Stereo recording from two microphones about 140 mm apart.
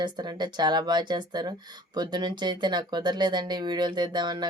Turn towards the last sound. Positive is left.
turn(degrees=-30)  # may be behind; listen again after turning